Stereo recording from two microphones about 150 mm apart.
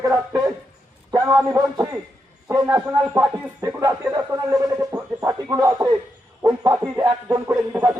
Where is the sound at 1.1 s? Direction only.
20° right (ahead or behind).